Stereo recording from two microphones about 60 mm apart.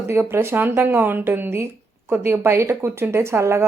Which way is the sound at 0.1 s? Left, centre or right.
Right.